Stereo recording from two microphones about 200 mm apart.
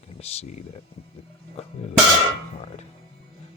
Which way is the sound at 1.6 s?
30° left (ahead or behind).